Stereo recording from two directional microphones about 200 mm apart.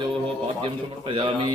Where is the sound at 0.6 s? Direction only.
25° right (ahead or behind).